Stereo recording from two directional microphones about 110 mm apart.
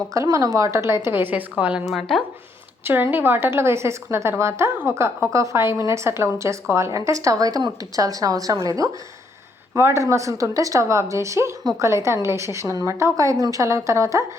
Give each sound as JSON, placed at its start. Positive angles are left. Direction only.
{"t": 0.1, "sound": "a woman's voice", "side_deg": -30}
{"t": 1.8, "sound": "speech", "side_deg": 0}
{"t": 2.8, "sound": "a woman's voice", "side_deg": -20}